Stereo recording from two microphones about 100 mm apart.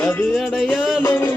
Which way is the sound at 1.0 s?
30° left (ahead or behind).